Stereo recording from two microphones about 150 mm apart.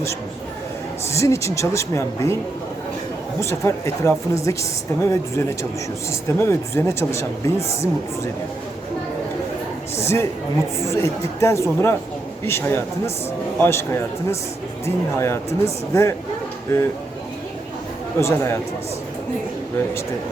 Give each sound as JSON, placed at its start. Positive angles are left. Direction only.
{"t": 1.1, "sound": "speech", "side_deg": 20}
{"t": 3.4, "sound": "speech", "side_deg": 20}
{"t": 10.0, "sound": "a man's voice", "side_deg": 20}
{"t": 18.2, "sound": "speech", "side_deg": 20}